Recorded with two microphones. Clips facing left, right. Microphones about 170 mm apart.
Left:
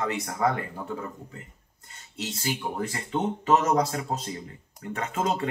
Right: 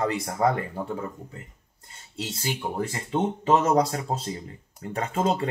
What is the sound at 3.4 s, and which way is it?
Speech, 30° right (ahead or behind).